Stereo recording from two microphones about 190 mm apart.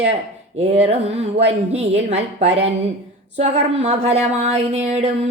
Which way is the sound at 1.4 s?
30° right (ahead or behind).